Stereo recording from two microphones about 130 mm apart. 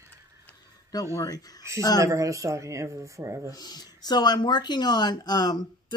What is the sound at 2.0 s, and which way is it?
Speech, 25° right (ahead or behind).